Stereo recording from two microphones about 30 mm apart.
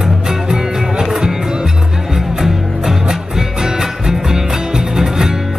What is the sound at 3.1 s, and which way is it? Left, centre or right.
Music, centre.